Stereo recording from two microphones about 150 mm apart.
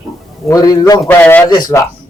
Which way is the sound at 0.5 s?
25° left (ahead or behind).